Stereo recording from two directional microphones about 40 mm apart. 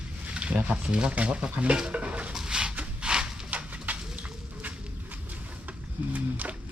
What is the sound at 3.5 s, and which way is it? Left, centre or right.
Bird, right.